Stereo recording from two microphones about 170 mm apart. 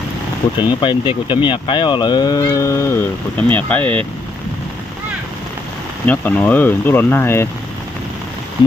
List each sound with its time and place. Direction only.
0.8 s speech: 30° left (ahead or behind); by 4.0 s 10° left (ahead or behind)
6.1 s speech: 10° left (ahead or behind)